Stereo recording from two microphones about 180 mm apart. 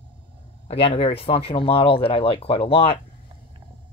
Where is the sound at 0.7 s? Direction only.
30° left (ahead or behind).